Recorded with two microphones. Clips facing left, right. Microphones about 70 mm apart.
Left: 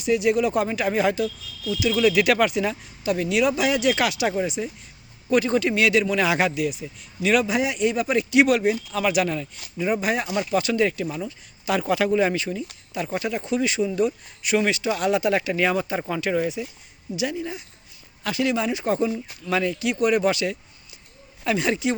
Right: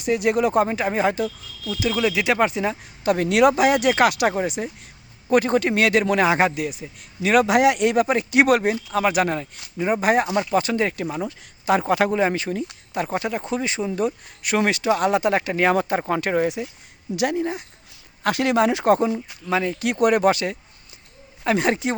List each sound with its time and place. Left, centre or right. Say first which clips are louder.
0.0 s speech: right 1 dB; right
0.7 s speech: right 1 dB; right
3.0 s speech: right 5 dB; right
7.4 s speech: right 5 dB; right
8.0 s speech: right 1 dB; right
17.2 s speech: right 5 dB; right
18.9 s speech: right 2 dB; right
19.5 s speech: right 1 dB; right
19.8 s speech: right 4 dB; right